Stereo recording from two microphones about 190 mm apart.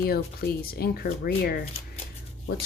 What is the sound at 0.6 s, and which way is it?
Speech, 50° left (ahead or behind).